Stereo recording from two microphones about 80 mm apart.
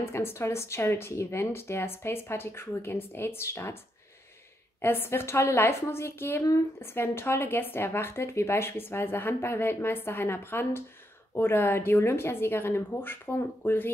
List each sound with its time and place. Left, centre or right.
0.1 s speech: left
4.8 s a woman's voice: left